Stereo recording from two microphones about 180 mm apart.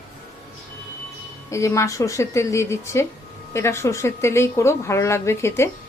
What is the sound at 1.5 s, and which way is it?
Speech, 15° left (ahead or behind).